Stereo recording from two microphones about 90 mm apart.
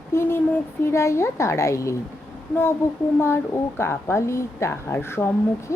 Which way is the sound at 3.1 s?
30° left (ahead or behind).